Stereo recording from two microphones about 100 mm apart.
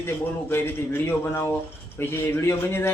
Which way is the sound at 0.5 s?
20° left (ahead or behind).